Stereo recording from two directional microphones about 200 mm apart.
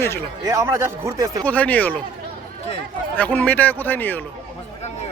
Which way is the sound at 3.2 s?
10° left (ahead or behind).